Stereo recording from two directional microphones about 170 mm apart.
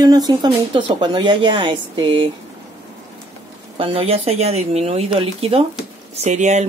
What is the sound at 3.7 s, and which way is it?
Speech, 35° right (ahead or behind).